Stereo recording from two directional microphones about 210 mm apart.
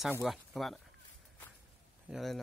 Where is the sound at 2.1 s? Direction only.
Centre (ahead or behind).